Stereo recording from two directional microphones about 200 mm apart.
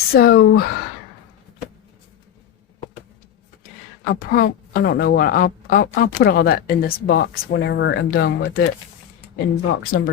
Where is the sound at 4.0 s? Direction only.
45° left (ahead or behind).